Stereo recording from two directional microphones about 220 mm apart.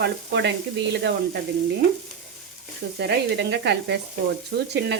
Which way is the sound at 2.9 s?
50° right (ahead or behind).